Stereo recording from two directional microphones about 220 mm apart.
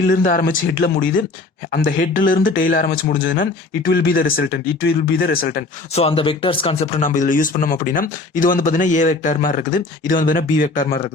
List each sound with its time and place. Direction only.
0.1 s speech: 35° left (ahead or behind)
5.9 s speech: 25° left (ahead or behind)